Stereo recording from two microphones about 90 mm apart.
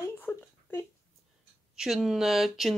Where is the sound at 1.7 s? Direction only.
5° right (ahead or behind).